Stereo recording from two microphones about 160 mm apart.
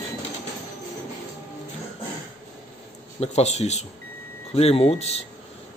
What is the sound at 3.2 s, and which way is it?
Speech, 40° left (ahead or behind).